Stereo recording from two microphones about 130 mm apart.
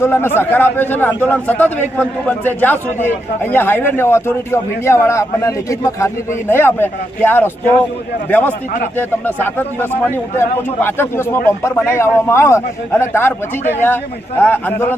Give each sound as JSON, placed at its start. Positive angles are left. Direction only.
{"t": 0.0, "sound": "a man's voice", "side_deg": 20}